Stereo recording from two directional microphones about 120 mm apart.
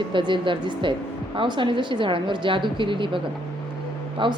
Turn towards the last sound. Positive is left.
turn(degrees=-45)  # may be behind; listen again after turning